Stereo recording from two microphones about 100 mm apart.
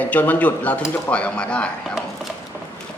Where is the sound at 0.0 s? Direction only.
15° left (ahead or behind).